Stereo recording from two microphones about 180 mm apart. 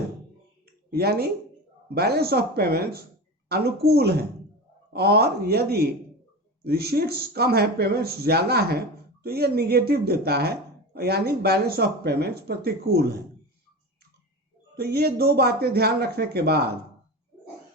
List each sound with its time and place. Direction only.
0.9 s speech: 60° right (ahead or behind)
14.8 s speech: 60° right (ahead or behind)